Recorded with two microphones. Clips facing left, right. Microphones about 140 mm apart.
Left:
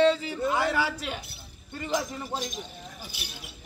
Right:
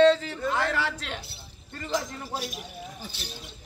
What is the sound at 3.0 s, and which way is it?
Speech, 10° left (ahead or behind).